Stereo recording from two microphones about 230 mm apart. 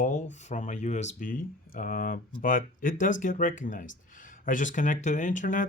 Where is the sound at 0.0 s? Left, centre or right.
Left.